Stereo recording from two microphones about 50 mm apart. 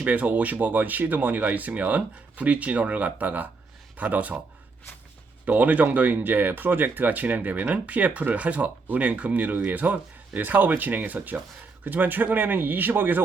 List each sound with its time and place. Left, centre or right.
0.0 s speech: right
5.5 s speech: right